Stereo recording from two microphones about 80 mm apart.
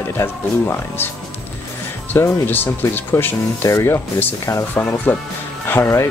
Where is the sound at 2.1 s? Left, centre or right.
Left.